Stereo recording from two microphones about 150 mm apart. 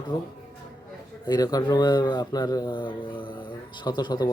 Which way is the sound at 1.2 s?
25° left (ahead or behind).